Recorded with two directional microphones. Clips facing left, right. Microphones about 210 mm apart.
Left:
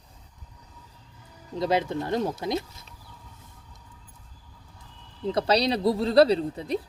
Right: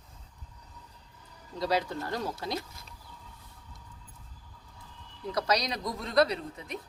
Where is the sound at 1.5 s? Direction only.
20° left (ahead or behind).